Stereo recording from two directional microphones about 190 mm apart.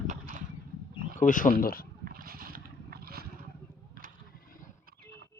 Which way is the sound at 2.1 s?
50° right (ahead or behind).